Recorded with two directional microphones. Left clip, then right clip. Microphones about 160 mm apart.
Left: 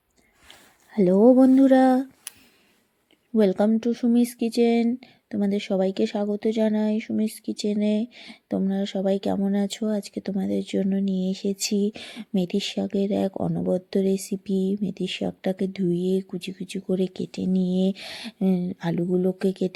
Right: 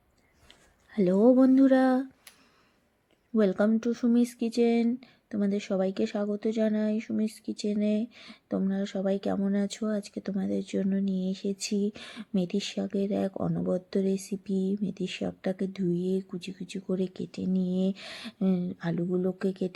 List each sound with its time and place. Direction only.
0.4 s speech: 20° left (ahead or behind)
3.3 s speech: 15° left (ahead or behind)